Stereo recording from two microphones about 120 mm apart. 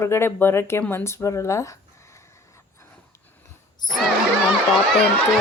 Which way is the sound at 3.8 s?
35° left (ahead or behind).